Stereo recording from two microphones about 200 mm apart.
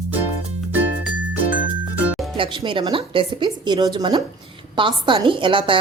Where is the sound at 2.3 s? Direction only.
25° right (ahead or behind).